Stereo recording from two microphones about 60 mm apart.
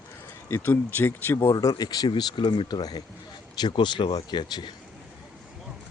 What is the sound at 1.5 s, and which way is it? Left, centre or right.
Speech, left.